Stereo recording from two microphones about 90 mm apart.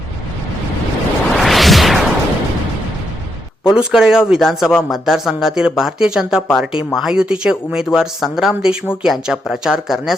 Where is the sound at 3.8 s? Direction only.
10° right (ahead or behind).